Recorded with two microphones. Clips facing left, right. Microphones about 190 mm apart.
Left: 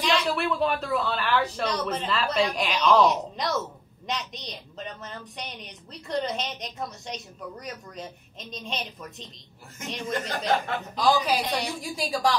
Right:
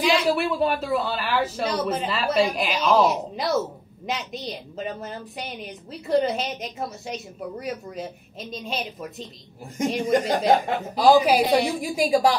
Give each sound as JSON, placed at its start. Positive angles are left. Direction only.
{"t": 0.0, "sound": "a woman's voice", "side_deg": -5}
{"t": 10.3, "sound": "speech", "side_deg": -50}
{"t": 11.0, "sound": "a woman's voice", "side_deg": -10}